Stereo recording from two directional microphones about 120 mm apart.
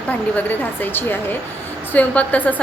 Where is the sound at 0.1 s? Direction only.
15° left (ahead or behind).